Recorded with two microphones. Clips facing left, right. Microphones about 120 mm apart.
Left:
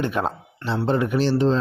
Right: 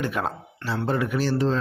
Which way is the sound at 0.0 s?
25° left (ahead or behind).